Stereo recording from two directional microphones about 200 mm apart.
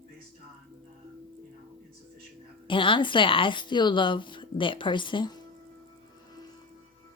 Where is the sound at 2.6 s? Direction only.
25° left (ahead or behind).